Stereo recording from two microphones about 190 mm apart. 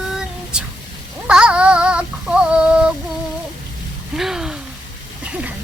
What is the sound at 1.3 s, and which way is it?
Synthetic singing, 5° right (ahead or behind).